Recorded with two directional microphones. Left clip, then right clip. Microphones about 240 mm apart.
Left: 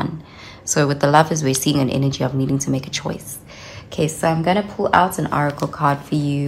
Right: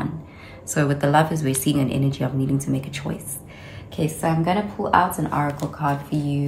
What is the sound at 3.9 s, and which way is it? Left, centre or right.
Speech, left.